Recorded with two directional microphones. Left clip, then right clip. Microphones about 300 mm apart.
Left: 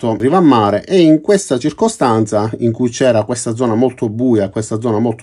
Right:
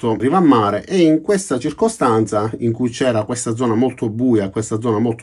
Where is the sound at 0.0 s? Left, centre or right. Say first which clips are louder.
Left 3 dB; centre.